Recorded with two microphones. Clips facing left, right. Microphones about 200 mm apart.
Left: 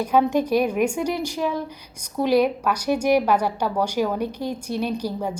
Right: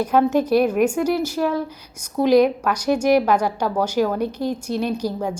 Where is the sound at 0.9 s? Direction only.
10° right (ahead or behind).